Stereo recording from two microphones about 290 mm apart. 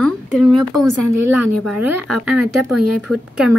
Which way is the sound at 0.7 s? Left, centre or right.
Right.